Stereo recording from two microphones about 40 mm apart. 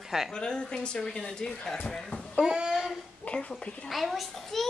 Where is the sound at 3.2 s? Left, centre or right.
Left.